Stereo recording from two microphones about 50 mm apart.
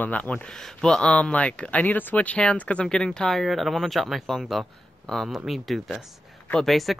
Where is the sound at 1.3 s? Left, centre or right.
Left.